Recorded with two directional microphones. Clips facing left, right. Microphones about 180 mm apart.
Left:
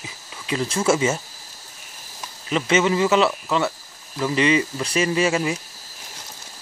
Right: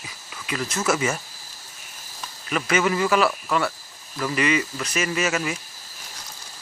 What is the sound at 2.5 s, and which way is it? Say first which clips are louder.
Speech: left 3 dB; 25° left (ahead or behind).